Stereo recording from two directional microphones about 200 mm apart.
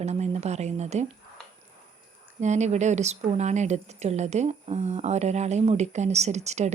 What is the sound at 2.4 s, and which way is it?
Speech, 35° right (ahead or behind).